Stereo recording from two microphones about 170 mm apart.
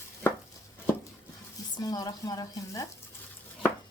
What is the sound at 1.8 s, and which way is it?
Speech, 20° left (ahead or behind).